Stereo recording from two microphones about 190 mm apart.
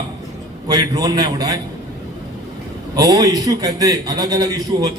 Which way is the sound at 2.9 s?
20° right (ahead or behind).